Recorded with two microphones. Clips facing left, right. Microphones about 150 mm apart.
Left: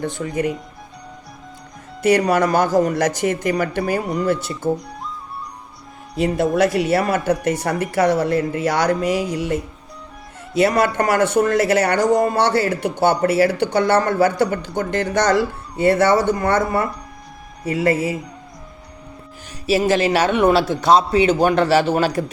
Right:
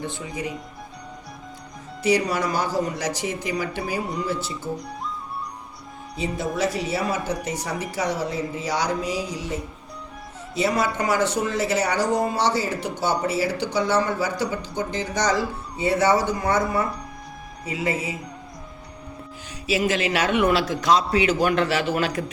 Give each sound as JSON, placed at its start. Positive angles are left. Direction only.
{"t": 0.2, "sound": "speech", "side_deg": 55}
{"t": 2.0, "sound": "speech", "side_deg": 55}
{"t": 6.1, "sound": "speech", "side_deg": 75}
{"t": 10.6, "sound": "speech", "side_deg": 65}
{"t": 12.0, "sound": "speech", "side_deg": 50}
{"t": 19.7, "sound": "a man's voice", "side_deg": 40}